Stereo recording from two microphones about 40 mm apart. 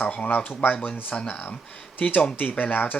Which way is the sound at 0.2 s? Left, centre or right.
Left.